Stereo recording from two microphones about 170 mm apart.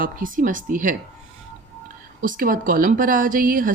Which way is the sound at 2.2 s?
55° right (ahead or behind).